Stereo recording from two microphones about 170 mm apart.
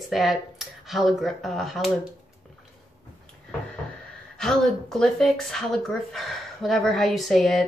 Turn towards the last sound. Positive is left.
turn(degrees=0)  # may be behind; listen again after turning